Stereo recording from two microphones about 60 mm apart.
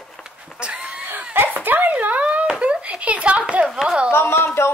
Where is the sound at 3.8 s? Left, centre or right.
Centre.